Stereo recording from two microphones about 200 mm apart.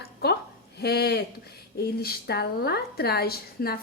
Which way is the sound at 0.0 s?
55° left (ahead or behind).